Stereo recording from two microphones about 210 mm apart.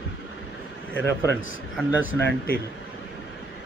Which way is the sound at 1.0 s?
55° right (ahead or behind).